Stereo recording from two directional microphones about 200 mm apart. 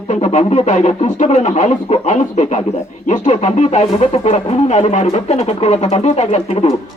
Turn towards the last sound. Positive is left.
turn(degrees=30)  # may be behind; listen again after turning